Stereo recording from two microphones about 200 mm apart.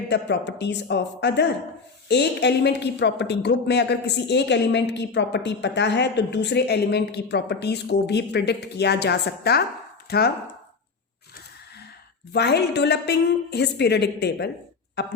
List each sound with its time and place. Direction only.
0.1 s speech: 60° left (ahead or behind)
12.3 s speech: 55° left (ahead or behind)